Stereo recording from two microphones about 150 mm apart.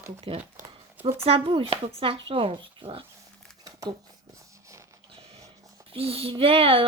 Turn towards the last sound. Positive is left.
turn(degrees=-40)  # may be behind; listen again after turning